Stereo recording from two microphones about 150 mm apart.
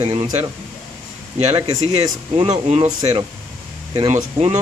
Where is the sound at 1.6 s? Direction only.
40° right (ahead or behind).